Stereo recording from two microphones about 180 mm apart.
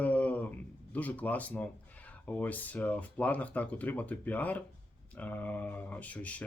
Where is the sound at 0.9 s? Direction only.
10° left (ahead or behind).